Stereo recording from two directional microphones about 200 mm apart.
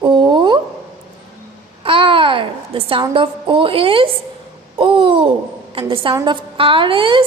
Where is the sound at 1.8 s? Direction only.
25° right (ahead or behind).